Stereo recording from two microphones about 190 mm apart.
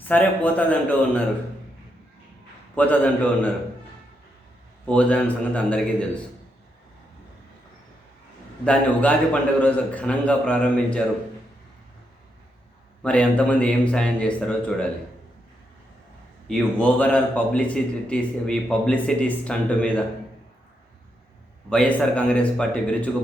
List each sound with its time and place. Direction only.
0.1 s a man's voice: 10° left (ahead or behind)
2.7 s a man's voice: 10° left (ahead or behind)
4.9 s a man's voice: 5° left (ahead or behind)
8.6 s a man's voice: 5° left (ahead or behind)
13.0 s a man's voice: 5° left (ahead or behind)
16.5 s a man's voice: 5° left (ahead or behind)
21.7 s a man's voice: 5° left (ahead or behind)